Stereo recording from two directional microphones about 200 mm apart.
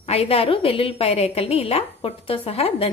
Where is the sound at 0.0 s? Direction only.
30° left (ahead or behind).